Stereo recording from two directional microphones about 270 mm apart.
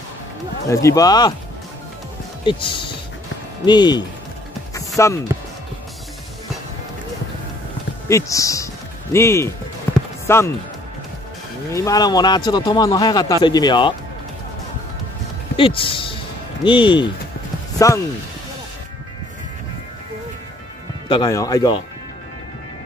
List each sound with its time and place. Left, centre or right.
0.7 s speech: centre
2.4 s speech: centre
4.7 s music: centre
8.1 s speech: centre
9.9 s music: centre
10.2 s speech: centre
11.7 s speech: centre
15.5 s speech: centre
21.1 s speech: centre